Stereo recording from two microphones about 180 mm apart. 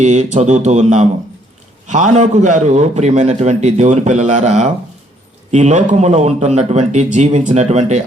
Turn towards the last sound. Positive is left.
turn(degrees=-40)  # may be behind; listen again after turning